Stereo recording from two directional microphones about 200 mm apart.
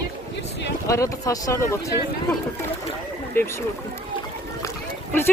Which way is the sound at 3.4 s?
10° left (ahead or behind).